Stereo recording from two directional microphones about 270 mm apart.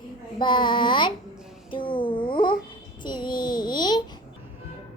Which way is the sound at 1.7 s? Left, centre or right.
Centre.